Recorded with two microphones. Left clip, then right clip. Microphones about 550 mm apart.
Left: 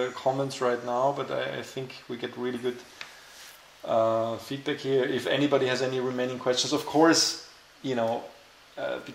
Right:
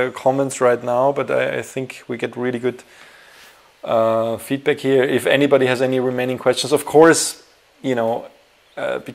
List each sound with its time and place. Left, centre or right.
0.0 s speech: right
3.8 s speech: right